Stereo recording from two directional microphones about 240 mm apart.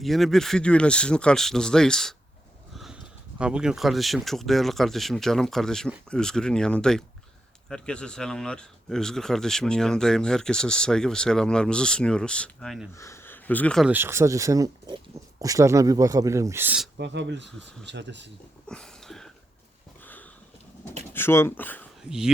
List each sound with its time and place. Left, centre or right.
0.0 s speech: centre
13.0 s speech: centre
17.0 s speech: right
18.7 s a sound: centre
21.1 s speech: centre